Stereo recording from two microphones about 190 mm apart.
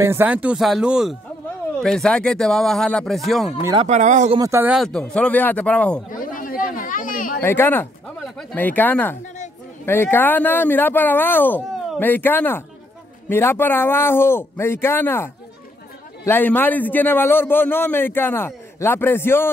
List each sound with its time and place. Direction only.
0.0 s speech: 10° right (ahead or behind)
3.8 s speech: 40° right (ahead or behind)
4.4 s speech: 10° right (ahead or behind)
4.8 s a man's voice: 5° left (ahead or behind)
6.1 s a sound: 45° left (ahead or behind)
7.4 s a man's voice: 10° left (ahead or behind)